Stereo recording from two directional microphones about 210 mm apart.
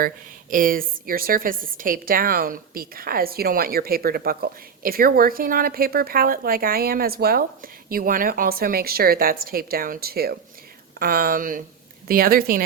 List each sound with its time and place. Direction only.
0.5 s a woman's voice: 40° right (ahead or behind)